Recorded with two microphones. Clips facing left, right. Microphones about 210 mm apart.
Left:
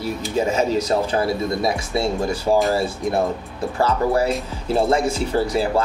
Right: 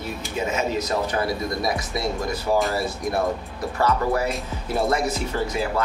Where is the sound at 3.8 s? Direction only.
30° left (ahead or behind).